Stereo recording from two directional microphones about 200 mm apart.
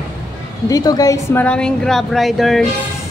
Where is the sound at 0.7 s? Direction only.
20° left (ahead or behind); by 2.6 s centre (ahead or behind).